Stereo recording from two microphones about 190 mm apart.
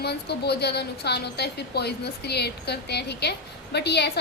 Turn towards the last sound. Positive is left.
turn(degrees=60)  # may be behind; listen again after turning